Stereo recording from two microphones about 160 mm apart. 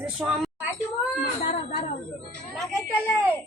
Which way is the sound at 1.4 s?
55° left (ahead or behind).